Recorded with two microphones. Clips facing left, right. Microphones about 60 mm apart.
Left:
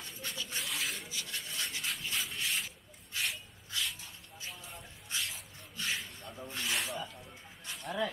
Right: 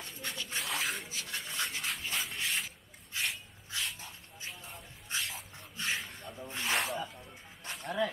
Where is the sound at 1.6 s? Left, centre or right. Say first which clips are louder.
Right 3 dB; right.